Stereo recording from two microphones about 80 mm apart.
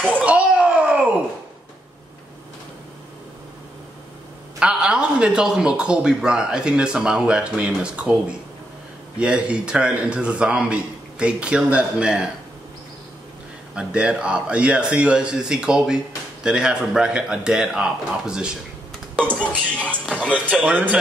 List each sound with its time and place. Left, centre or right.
0.2 s a sound: centre
4.6 s a man's voice: centre
13.7 s a man's voice: centre
19.4 s speech: centre
20.2 s a man's voice: centre